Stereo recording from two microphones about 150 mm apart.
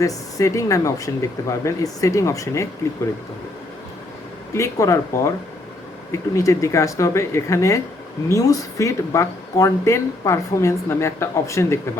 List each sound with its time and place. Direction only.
0.0 s speech: 20° left (ahead or behind)
4.5 s speech: 20° left (ahead or behind)